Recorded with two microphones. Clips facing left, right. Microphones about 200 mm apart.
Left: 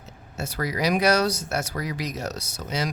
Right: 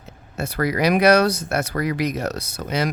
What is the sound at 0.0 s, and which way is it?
Speech, 60° right (ahead or behind).